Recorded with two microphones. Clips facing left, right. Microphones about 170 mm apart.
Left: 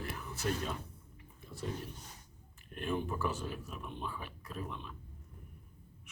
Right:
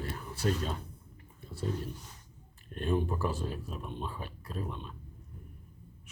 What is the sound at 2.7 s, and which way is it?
Speech, 35° right (ahead or behind).